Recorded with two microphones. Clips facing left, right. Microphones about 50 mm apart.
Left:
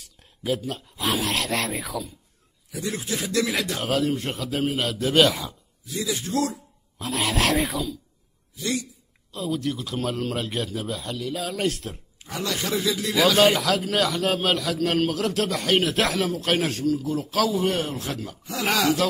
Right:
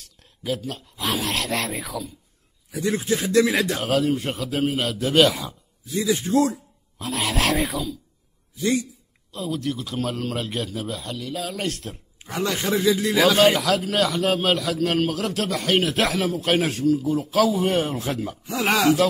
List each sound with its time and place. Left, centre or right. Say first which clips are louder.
0.0 s speech: left 1 dB; centre
2.7 s speech: right 6 dB; right
3.8 s a man's voice: right 2 dB; centre
5.9 s speech: right 6 dB; right
7.0 s a man's voice: even; centre
8.5 s a man's voice: right 5 dB; right
9.3 s a man's voice: even; centre
12.2 s a man's voice: right 3 dB; right
13.4 s a man's voice: right 1 dB; centre
17.9 s speech: right 4 dB; centre